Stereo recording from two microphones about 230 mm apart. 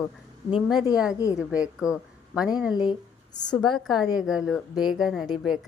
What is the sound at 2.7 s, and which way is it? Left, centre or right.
Speech, centre.